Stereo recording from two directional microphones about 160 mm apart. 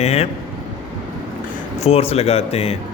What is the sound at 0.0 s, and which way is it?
Speech, 40° left (ahead or behind).